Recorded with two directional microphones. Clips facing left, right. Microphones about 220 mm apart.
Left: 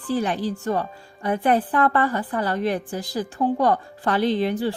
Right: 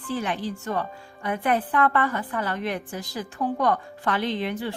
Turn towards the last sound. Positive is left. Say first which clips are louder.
# left 6 dB
turn(degrees=35)  # may be behind; listen again after turning